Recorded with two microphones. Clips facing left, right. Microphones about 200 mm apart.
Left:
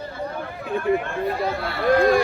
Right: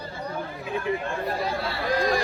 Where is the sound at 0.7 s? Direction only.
55° left (ahead or behind).